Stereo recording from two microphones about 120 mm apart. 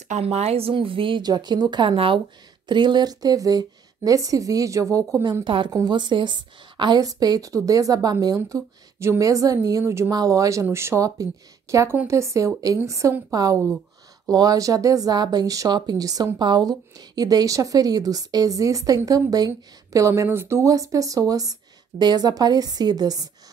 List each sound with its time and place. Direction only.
0.1 s speech: 60° right (ahead or behind); by 5.4 s 25° right (ahead or behind)
5.4 s a woman's voice: 40° right (ahead or behind)